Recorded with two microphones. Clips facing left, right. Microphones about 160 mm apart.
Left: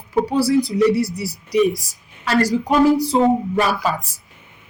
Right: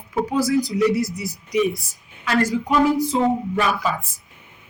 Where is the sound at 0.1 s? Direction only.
30° left (ahead or behind).